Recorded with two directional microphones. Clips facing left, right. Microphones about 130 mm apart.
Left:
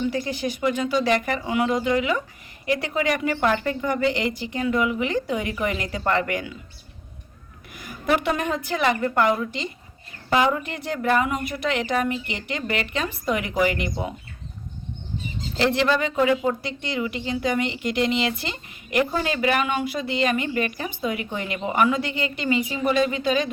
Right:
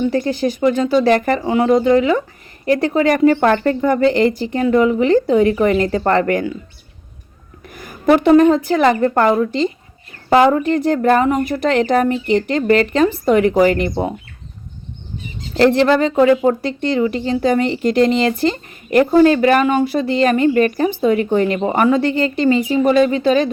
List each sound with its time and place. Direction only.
0.1 s a woman's voice: 40° right (ahead or behind)
1.5 s a woman's voice: 35° right (ahead or behind)
7.7 s a woman's voice: 45° right (ahead or behind)
15.5 s a woman's voice: 45° right (ahead or behind)